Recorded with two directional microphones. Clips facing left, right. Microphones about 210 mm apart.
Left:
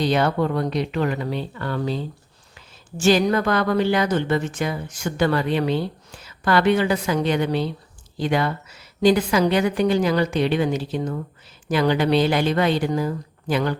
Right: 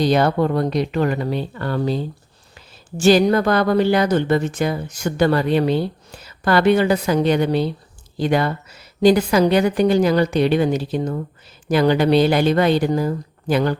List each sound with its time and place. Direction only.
0.0 s speech: 40° right (ahead or behind)